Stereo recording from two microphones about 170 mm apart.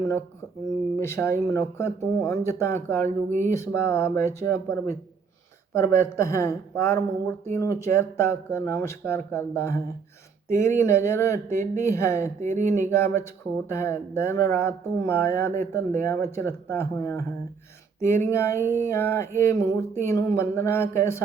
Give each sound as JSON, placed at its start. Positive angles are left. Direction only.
{"t": 1.0, "sound": "speech", "side_deg": 15}
{"t": 3.0, "sound": "speech", "side_deg": -45}
{"t": 3.5, "sound": "speech", "side_deg": 15}
{"t": 12.4, "sound": "speech", "side_deg": -45}
{"t": 12.9, "sound": "speech", "side_deg": 15}